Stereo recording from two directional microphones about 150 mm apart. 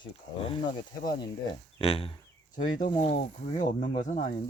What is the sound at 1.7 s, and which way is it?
Speech, 40° left (ahead or behind).